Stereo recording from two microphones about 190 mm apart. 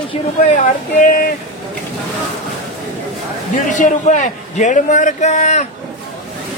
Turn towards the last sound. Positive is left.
turn(degrees=40)  # may be behind; listen again after turning